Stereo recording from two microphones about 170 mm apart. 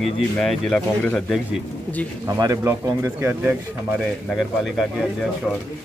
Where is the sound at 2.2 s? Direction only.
20° right (ahead or behind).